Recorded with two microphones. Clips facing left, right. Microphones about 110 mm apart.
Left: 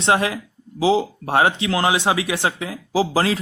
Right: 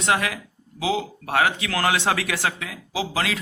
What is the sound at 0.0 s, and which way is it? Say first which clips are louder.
A man's voice: left 4 dB; 30° left (ahead or behind).